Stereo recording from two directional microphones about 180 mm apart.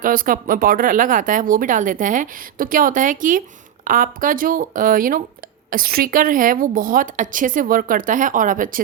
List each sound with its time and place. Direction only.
0.0 s speech: 50° right (ahead or behind)